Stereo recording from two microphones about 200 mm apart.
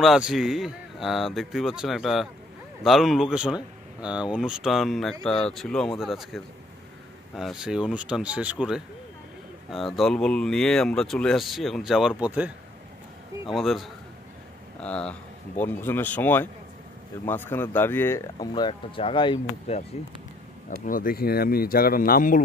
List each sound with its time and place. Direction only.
0.0 s speech: centre (ahead or behind); by 19.8 s 25° left (ahead or behind)
20.8 s speech: 45° left (ahead or behind)